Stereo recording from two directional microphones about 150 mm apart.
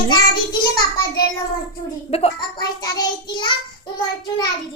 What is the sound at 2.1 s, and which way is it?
Speech, 40° left (ahead or behind).